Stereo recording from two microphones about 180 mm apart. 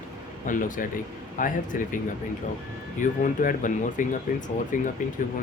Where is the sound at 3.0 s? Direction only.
45° left (ahead or behind).